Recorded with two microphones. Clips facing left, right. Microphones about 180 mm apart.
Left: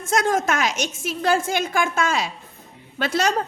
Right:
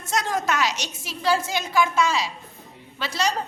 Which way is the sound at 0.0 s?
50° left (ahead or behind).